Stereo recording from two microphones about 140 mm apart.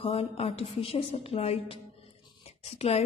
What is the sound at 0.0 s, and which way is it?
A woman's voice, 45° left (ahead or behind).